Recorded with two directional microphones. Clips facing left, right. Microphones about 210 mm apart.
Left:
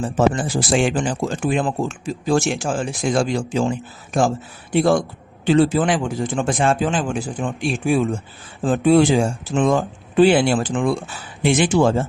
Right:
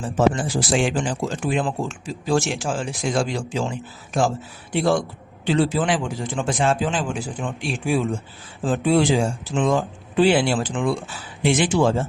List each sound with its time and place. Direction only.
0.2 s speech: 50° left (ahead or behind)